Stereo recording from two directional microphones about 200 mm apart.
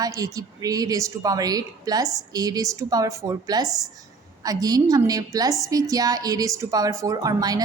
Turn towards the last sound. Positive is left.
turn(degrees=-20)  # may be behind; listen again after turning